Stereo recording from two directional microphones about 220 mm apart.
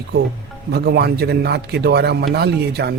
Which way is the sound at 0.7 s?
45° right (ahead or behind).